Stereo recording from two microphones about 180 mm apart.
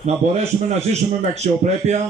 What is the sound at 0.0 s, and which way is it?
A man's voice, 35° right (ahead or behind).